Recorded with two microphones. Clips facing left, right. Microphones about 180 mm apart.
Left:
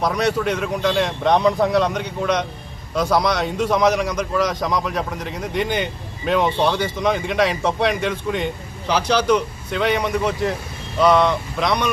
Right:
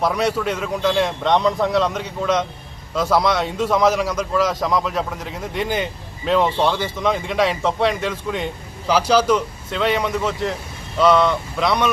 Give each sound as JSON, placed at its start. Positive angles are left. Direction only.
{"t": 0.0, "sound": "a man's voice", "side_deg": -5}